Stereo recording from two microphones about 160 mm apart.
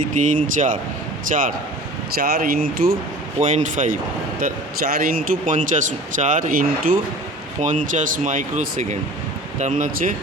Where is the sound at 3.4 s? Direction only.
50° right (ahead or behind).